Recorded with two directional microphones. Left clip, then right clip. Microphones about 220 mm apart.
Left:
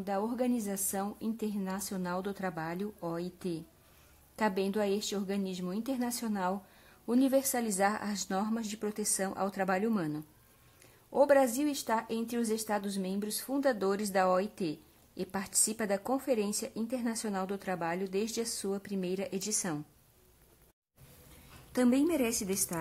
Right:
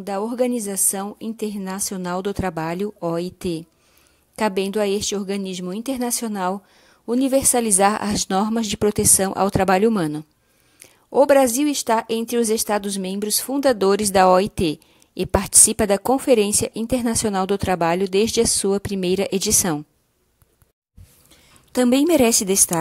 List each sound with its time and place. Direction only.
0.0 s speech: 35° right (ahead or behind)
21.7 s speech: 40° right (ahead or behind)